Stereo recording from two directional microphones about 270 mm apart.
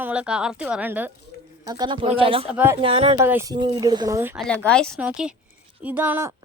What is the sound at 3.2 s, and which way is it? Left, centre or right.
A woman's voice, centre.